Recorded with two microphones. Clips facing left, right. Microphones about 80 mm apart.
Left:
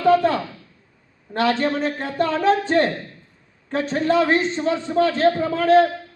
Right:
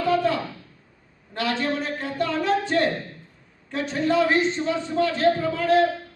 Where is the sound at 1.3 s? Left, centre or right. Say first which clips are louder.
Left 5 dB; left.